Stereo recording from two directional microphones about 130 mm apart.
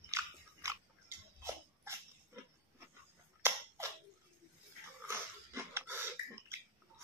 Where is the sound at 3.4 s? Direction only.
20° right (ahead or behind).